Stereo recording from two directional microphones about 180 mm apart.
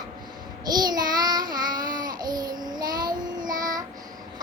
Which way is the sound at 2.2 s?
20° right (ahead or behind).